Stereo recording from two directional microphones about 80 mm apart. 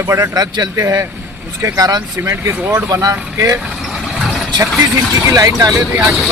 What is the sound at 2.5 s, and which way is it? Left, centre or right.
Speech, centre.